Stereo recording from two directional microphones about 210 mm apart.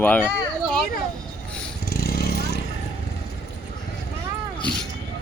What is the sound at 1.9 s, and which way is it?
Vehicle, 45° left (ahead or behind).